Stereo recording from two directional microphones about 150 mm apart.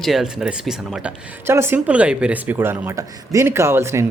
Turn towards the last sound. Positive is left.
turn(degrees=-20)  # may be behind; listen again after turning